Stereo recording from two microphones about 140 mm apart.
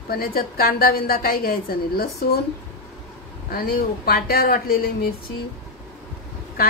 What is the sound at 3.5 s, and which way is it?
A woman's voice, 90° left.